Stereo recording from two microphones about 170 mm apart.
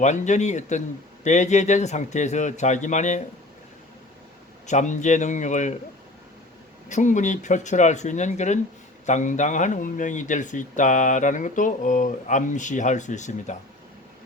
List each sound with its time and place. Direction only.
0.0 s speech: 45° left (ahead or behind)
4.6 s speech: 45° left (ahead or behind)
6.8 s speech: 45° left (ahead or behind)